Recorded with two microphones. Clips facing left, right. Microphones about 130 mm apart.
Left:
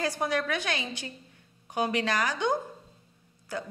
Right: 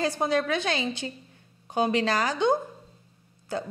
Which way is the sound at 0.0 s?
25° right (ahead or behind).